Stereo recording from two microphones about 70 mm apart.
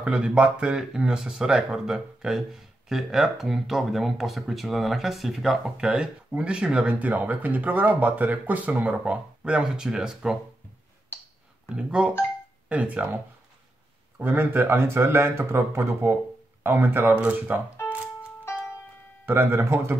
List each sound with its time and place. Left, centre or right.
0.0 s speech: centre
11.7 s speech: centre
18.4 s music: left
19.2 s speech: right